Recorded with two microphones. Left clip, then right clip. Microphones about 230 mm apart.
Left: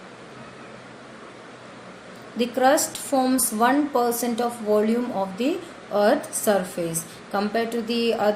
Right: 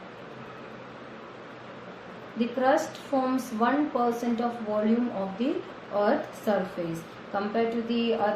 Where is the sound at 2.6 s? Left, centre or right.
Left.